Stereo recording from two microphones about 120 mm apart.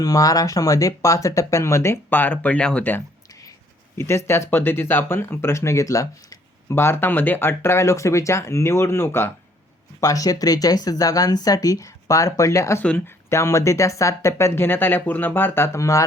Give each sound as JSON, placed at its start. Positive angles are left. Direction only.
{"t": 0.0, "sound": "speech", "side_deg": 30}